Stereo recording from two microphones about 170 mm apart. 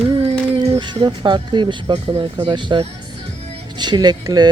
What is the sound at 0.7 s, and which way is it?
Speech, 30° right (ahead or behind).